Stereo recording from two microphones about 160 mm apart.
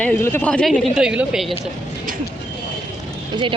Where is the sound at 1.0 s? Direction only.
5° right (ahead or behind).